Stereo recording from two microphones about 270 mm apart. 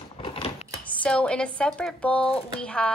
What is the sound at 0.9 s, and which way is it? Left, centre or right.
A woman's voice, centre.